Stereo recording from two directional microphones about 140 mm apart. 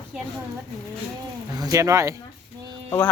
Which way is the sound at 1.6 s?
20° right (ahead or behind).